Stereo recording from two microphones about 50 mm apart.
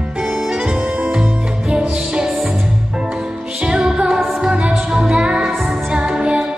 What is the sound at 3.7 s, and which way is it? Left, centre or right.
Music, centre.